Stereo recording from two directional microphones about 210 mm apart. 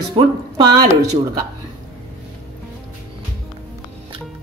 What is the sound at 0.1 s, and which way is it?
Speech, 20° right (ahead or behind).